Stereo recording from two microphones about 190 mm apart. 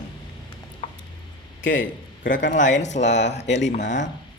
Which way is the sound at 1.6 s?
80° left.